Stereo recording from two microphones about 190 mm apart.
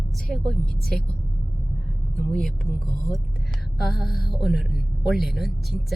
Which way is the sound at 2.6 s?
15° left (ahead or behind).